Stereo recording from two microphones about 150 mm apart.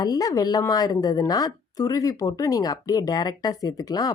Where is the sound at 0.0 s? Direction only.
25° left (ahead or behind).